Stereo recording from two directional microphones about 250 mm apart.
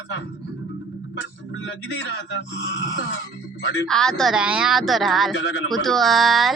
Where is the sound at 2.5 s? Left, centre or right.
Left.